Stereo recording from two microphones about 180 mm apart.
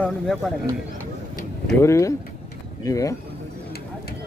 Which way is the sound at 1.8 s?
15° left (ahead or behind).